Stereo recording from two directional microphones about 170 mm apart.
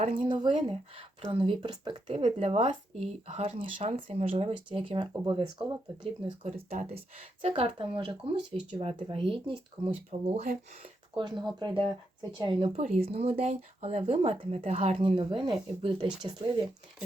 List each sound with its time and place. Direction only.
0.0 s speech: 30° right (ahead or behind)
6.4 s speech: 40° right (ahead or behind)
11.1 s speech: 25° right (ahead or behind)